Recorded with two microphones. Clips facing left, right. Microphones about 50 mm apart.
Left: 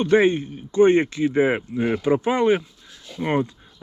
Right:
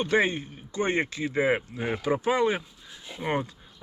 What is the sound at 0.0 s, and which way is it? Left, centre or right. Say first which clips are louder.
Speech: left 7 dB; left.